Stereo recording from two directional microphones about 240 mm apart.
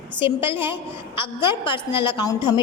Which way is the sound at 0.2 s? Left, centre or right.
Left.